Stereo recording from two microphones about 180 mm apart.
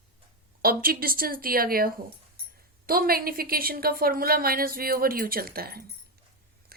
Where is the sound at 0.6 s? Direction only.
55° right (ahead or behind).